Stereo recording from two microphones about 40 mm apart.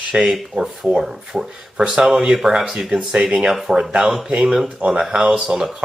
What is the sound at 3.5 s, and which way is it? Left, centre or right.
Speech, centre.